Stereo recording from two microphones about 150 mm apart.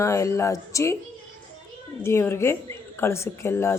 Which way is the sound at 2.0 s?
15° left (ahead or behind).